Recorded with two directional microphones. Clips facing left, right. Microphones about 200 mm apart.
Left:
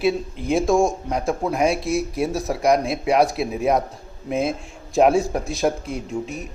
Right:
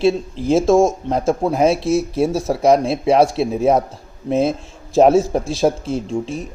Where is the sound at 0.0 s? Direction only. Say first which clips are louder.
Right 5 dB; 30° right (ahead or behind).